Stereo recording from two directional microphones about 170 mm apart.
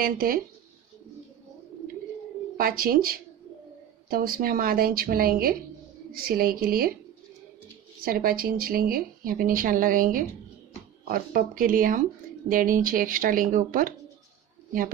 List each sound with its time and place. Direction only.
0.0 s speech: 60° right (ahead or behind)
2.5 s speech: 60° right (ahead or behind)
8.0 s speech: 60° right (ahead or behind)